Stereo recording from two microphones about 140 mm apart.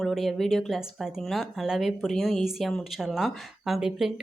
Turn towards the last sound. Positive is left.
turn(degrees=0)  # may be behind; listen again after turning